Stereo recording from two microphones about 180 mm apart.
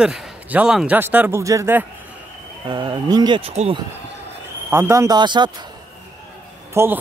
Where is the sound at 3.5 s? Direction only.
35° right (ahead or behind).